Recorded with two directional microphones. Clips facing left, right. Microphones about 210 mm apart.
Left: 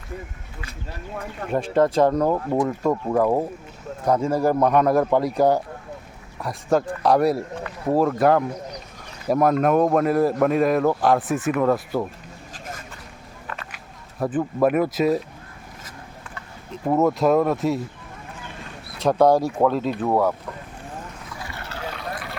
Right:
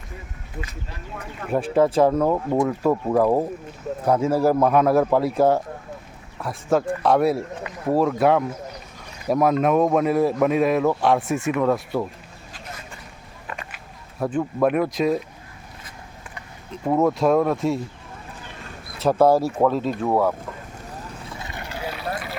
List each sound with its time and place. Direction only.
1.5 s speech: 5° right (ahead or behind)
12.5 s vehicle: 45° left (ahead or behind)
14.2 s speech: 5° left (ahead or behind)
16.7 s speech: centre (ahead or behind)
18.9 s speech: 5° right (ahead or behind)
21.2 s vehicle: 20° right (ahead or behind)